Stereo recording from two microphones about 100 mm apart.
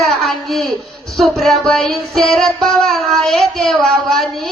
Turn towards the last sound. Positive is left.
turn(degrees=5)  # may be behind; listen again after turning